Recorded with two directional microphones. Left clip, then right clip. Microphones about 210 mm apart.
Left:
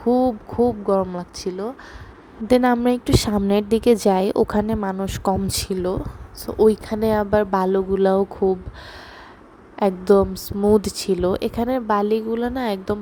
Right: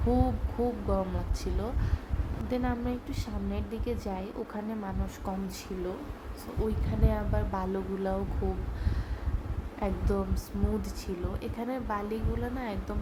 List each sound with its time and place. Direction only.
0.1 s a woman's voice: 30° left (ahead or behind)
2.5 s a woman's voice: 50° left (ahead or behind)
9.8 s a woman's voice: 40° left (ahead or behind)